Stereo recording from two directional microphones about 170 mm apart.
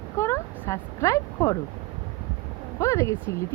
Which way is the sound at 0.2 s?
15° left (ahead or behind).